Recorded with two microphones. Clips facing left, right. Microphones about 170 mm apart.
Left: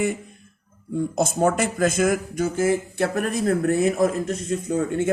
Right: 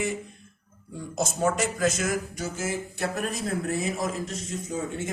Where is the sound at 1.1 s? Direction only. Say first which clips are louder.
Left 4 dB; 55° left (ahead or behind).